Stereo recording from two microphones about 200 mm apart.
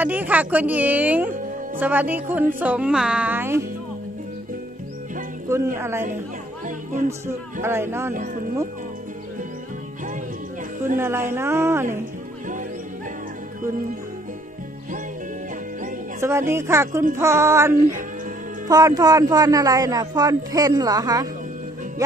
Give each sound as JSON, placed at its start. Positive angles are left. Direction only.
{"t": 0.0, "sound": "speech", "side_deg": -10}
{"t": 5.8, "sound": "speech", "side_deg": -15}
{"t": 7.6, "sound": "speech", "side_deg": -10}
{"t": 11.0, "sound": "speech", "side_deg": -10}
{"t": 16.2, "sound": "speech", "side_deg": -15}